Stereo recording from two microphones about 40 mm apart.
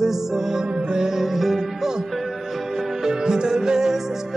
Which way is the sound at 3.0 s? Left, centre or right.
Centre.